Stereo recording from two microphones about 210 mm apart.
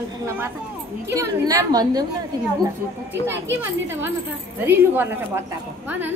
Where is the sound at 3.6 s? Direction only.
10° right (ahead or behind).